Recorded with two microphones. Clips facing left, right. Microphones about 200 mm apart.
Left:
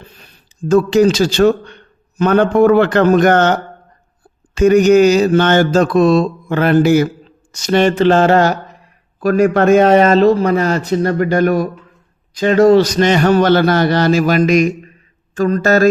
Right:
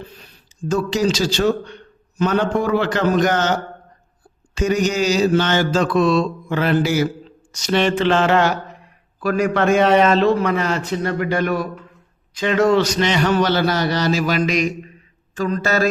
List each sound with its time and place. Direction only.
0.2 s a man's voice: 55° left (ahead or behind)
4.5 s mantra: 55° left (ahead or behind)
7.5 s a man's voice: 50° left (ahead or behind)